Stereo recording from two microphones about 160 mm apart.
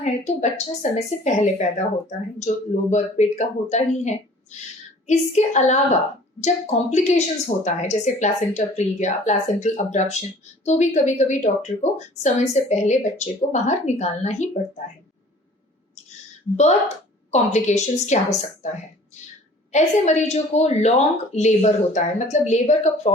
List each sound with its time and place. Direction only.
0.0 s a woman's voice: 45° left (ahead or behind)
17.3 s a woman's voice: 45° left (ahead or behind)
19.7 s a woman's voice: 45° left (ahead or behind)